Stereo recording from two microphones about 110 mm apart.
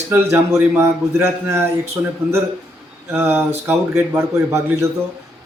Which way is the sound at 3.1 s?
20° right (ahead or behind).